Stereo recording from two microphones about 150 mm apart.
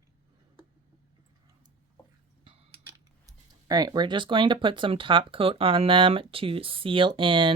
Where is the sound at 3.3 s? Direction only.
25° right (ahead or behind).